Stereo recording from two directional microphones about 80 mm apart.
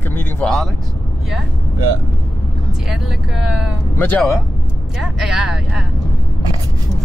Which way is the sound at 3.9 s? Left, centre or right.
Left.